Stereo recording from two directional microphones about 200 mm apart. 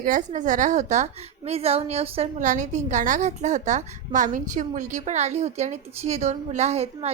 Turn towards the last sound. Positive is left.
turn(degrees=-30)  # may be behind; listen again after turning